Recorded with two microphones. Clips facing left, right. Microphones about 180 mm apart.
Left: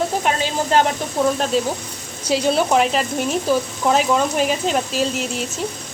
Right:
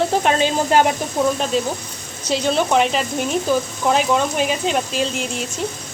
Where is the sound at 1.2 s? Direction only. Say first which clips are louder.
Left 1 dB; 5° right (ahead or behind).